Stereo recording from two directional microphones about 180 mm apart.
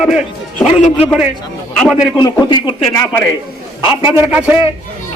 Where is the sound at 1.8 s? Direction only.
5° right (ahead or behind).